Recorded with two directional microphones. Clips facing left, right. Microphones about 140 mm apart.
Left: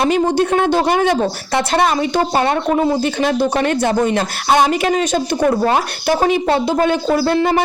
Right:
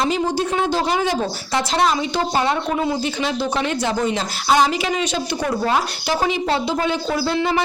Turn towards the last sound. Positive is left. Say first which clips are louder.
# left 5 dB
turn(degrees=50)  # may be behind; listen again after turning